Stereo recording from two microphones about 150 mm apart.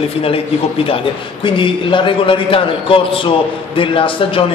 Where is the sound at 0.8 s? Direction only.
35° left (ahead or behind).